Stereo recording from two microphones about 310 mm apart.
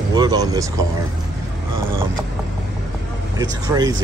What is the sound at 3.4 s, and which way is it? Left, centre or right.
Speech, centre.